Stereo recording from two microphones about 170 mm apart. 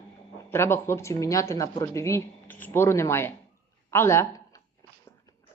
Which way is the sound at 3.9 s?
15° left (ahead or behind).